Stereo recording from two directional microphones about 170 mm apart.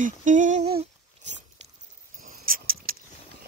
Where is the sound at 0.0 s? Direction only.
50° right (ahead or behind).